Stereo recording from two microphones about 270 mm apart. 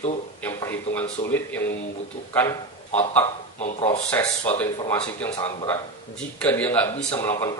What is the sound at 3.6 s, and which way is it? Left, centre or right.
Speech, left.